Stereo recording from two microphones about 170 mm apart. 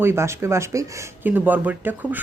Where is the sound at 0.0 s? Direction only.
15° right (ahead or behind).